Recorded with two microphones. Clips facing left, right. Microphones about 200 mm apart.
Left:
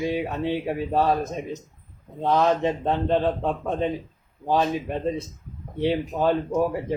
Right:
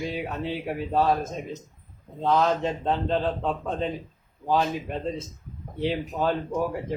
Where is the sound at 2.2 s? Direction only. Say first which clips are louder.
Left 2 dB; 15° left (ahead or behind).